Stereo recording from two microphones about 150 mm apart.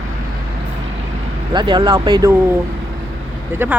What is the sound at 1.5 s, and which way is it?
Speech, 30° right (ahead or behind).